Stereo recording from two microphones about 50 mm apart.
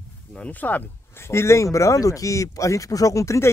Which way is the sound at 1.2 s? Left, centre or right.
Left.